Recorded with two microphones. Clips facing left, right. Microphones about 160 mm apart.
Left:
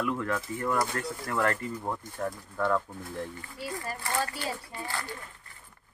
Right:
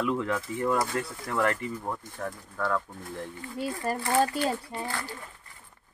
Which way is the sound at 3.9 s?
55° right (ahead or behind).